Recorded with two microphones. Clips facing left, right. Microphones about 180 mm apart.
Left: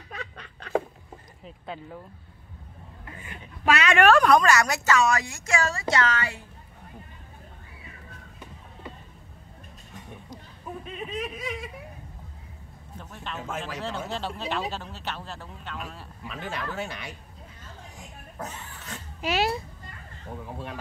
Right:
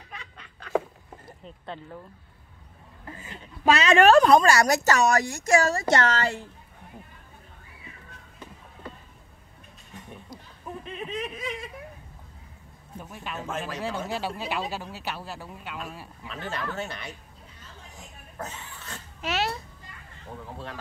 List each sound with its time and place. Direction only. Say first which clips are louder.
1.4 s speech: left 1 dB; 5° left (ahead or behind)
3.1 s a woman's voice: right 2 dB; 30° right (ahead or behind); by 6.4 s 50° right (ahead or behind)
11.1 s speech: even; 10° left (ahead or behind)
12.9 s speech: right 1 dB; 10° right (ahead or behind)
16.3 s speech: even; 10° left (ahead or behind)
17.9 s a sound: right 1 dB; 15° left (ahead or behind)
19.2 s children playing: left 3 dB; centre (ahead or behind)